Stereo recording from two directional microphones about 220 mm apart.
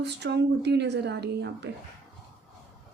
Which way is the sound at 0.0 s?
50° right (ahead or behind).